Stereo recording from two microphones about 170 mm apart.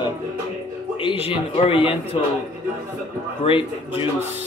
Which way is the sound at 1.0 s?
35° left (ahead or behind).